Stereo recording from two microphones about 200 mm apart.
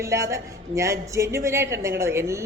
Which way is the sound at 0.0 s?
15° right (ahead or behind).